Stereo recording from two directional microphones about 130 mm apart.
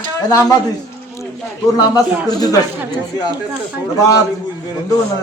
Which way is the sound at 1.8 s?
30° left (ahead or behind).